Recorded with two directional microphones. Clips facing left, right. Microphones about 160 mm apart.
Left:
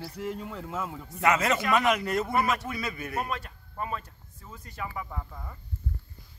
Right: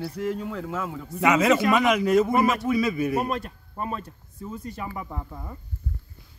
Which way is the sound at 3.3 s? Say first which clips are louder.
Right 6 dB; 40° right (ahead or behind).